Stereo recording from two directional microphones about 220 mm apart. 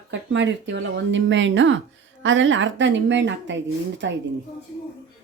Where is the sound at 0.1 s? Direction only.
55° right (ahead or behind).